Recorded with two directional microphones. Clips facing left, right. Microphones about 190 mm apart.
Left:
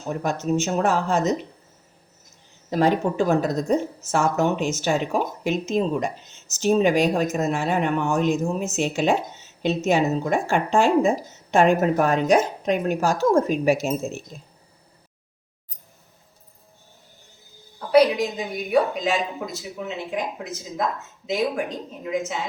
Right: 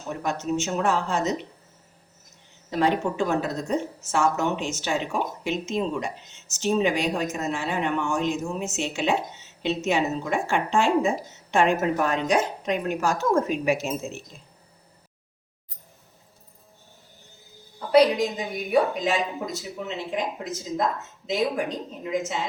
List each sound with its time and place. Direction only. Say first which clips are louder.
0.2 s speech: left 3 dB; 40° left (ahead or behind)
2.6 s speech: left 3 dB; 45° left (ahead or behind)
17.9 s a woman's voice: left 1 dB; centre (ahead or behind)
22.0 s a woman's voice: left 1 dB; centre (ahead or behind)